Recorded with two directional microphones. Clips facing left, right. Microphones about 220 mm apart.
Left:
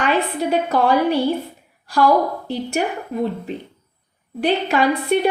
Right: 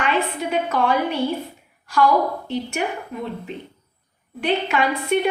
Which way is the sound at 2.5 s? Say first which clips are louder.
Left 3 dB; 35° left (ahead or behind).